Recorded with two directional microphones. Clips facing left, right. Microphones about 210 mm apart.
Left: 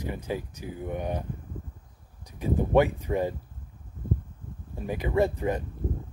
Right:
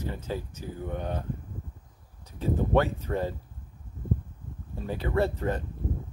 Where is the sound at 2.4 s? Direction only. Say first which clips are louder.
Left 2 dB; 15° left (ahead or behind).